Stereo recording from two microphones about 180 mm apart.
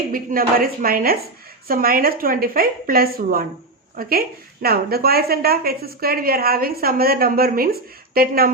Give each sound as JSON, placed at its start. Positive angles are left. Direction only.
{"t": 0.1, "sound": "a woman's voice", "side_deg": -50}